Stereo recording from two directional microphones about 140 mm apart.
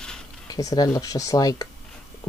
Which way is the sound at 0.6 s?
25° left (ahead or behind).